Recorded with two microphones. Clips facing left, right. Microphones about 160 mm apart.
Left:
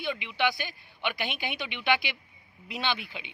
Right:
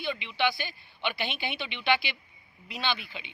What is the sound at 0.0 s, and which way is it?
A man's voice, 15° left (ahead or behind).